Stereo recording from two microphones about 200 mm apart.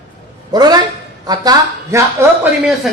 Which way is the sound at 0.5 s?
20° right (ahead or behind).